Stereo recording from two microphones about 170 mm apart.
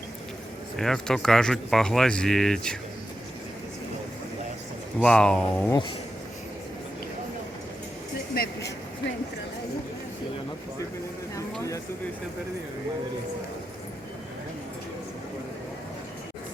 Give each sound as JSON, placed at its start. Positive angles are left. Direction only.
{"t": 0.8, "sound": "speech", "side_deg": 5}
{"t": 4.9, "sound": "speech", "side_deg": 5}
{"t": 8.4, "sound": "speech", "side_deg": 60}